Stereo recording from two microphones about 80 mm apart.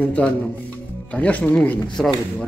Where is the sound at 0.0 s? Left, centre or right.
Centre.